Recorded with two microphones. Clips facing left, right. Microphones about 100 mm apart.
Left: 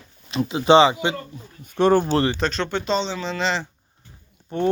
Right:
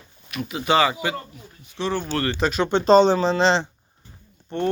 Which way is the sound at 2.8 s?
45° right (ahead or behind).